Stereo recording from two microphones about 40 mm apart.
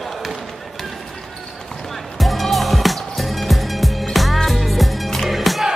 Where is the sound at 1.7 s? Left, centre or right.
Centre.